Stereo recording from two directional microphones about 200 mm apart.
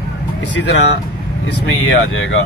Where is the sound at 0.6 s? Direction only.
65° left (ahead or behind).